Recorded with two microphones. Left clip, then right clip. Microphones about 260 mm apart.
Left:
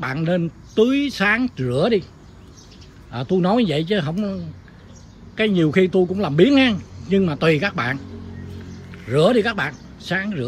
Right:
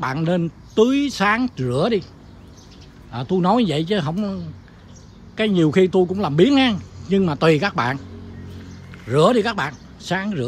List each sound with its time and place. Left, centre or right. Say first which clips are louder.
0.0 s a man's voice: even; centre
3.1 s a man's voice: right 1 dB; centre